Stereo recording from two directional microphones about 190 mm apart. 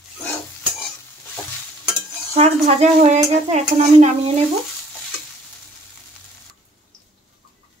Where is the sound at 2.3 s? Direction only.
35° right (ahead or behind).